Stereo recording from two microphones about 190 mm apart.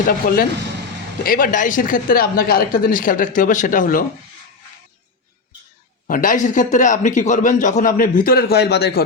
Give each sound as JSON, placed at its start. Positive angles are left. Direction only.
{"t": 0.1, "sound": "a man's voice", "side_deg": 50}
{"t": 6.1, "sound": "a man's voice", "side_deg": 45}